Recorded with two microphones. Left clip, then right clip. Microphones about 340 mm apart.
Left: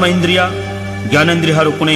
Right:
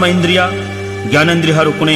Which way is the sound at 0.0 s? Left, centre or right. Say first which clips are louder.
Right 1 dB; left.